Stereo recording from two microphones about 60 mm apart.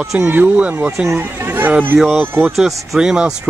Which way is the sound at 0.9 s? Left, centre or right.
Centre.